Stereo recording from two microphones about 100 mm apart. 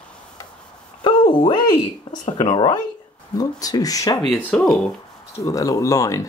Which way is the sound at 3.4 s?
40° left (ahead or behind).